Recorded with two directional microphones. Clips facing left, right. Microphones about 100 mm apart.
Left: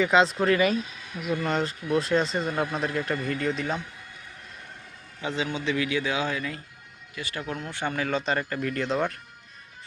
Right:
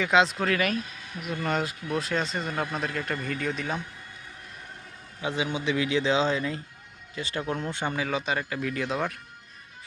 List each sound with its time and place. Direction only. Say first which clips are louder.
0.0 s speech: left 2 dB; centre (ahead or behind)
5.2 s a man's voice: even; 15° right (ahead or behind)
7.9 s speech: left 4 dB; 5° right (ahead or behind)